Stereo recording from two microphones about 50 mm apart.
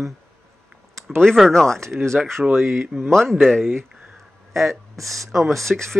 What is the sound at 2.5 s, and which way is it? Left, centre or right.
Speech, right.